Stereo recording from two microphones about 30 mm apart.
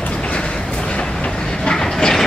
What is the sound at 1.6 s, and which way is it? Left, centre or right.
Train, left.